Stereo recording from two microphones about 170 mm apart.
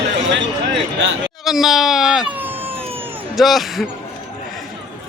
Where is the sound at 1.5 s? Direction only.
Centre (ahead or behind).